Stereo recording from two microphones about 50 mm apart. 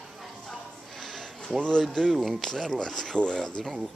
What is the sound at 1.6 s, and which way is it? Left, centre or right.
Speech, centre.